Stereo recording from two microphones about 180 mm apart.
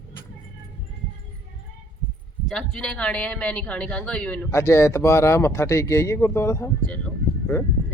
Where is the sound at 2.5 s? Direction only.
5° left (ahead or behind).